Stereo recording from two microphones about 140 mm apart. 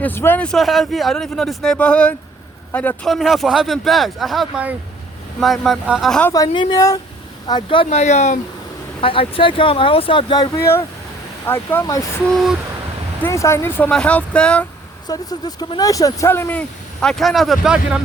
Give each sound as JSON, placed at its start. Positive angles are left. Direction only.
{"t": 0.0, "sound": "speech", "side_deg": 15}
{"t": 3.1, "sound": "speech", "side_deg": 0}
{"t": 6.3, "sound": "speech", "side_deg": 30}
{"t": 7.9, "sound": "speech", "side_deg": 55}
{"t": 9.0, "sound": "speech", "side_deg": 40}
{"t": 12.3, "sound": "speech", "side_deg": 0}
{"t": 13.2, "sound": "speech", "side_deg": 20}
{"t": 15.0, "sound": "speech", "side_deg": 30}